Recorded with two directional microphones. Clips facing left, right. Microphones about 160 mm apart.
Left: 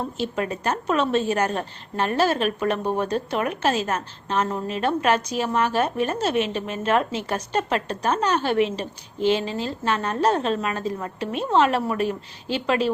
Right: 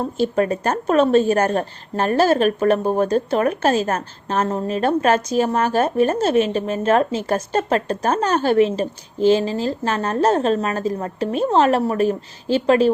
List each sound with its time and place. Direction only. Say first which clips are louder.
0.2 s a woman's voice: right 10 dB; 40° right (ahead or behind)